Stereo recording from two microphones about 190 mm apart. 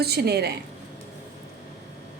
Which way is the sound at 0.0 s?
55° right (ahead or behind).